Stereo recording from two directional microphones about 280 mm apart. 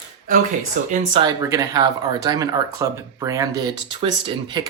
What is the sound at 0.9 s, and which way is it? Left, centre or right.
Speech, centre.